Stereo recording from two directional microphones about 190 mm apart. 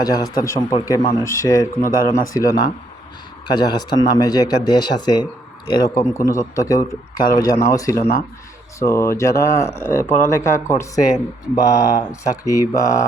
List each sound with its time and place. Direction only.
0.0 s speech: 15° left (ahead or behind)